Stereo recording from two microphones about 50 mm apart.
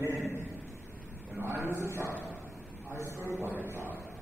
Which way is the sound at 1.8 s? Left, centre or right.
Right.